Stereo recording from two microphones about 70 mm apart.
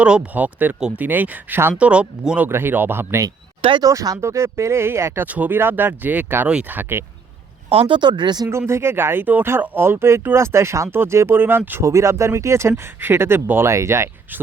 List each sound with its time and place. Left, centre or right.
0.0 s speech: centre; by 1.7 s right
1.8 s speech: centre
2.5 s speech: right
3.8 s speech: right
4.2 s speech: right
5.2 s speech: right
8.0 s speech: right
8.4 s speech: right
11.8 s speech: right